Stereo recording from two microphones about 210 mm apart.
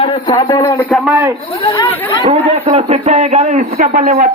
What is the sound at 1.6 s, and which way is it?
Speech, 20° left (ahead or behind).